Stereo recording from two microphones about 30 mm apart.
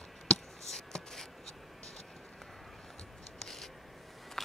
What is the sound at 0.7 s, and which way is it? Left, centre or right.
Writing, centre.